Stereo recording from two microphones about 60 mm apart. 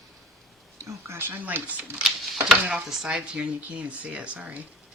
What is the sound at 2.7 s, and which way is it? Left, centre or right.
Speech, centre.